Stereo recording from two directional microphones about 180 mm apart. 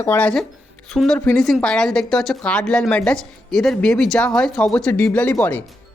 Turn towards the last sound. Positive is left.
turn(degrees=10)  # may be behind; listen again after turning